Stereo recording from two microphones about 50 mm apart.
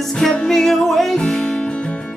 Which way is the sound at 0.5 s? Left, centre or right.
Centre.